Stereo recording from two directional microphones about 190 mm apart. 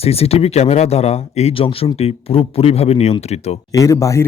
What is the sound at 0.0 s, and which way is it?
Speech, 30° left (ahead or behind).